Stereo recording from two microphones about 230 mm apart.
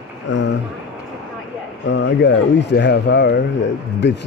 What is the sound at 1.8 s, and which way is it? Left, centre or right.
Speech, left.